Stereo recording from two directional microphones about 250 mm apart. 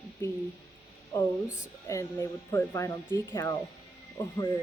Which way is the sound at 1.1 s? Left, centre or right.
Centre.